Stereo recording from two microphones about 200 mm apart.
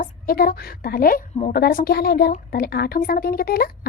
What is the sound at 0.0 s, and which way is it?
A woman's voice, 45° left (ahead or behind).